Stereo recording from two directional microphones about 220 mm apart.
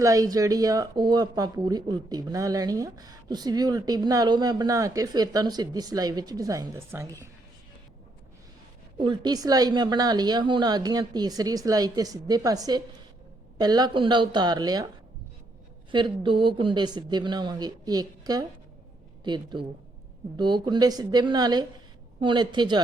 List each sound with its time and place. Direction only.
0.0 s speech: 15° right (ahead or behind)
9.0 s speech: 20° right (ahead or behind)
15.9 s speech: 20° right (ahead or behind)